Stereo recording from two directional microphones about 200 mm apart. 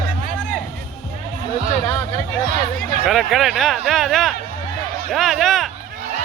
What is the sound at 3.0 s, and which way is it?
Speech, centre (ahead or behind).